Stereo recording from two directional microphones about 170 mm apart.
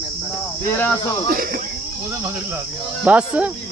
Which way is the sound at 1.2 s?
60° right (ahead or behind).